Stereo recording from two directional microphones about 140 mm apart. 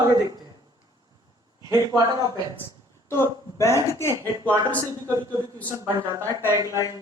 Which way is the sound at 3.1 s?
20° left (ahead or behind).